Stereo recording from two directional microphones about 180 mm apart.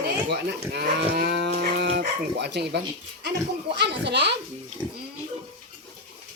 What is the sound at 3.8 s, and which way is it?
Speech, 70° right (ahead or behind).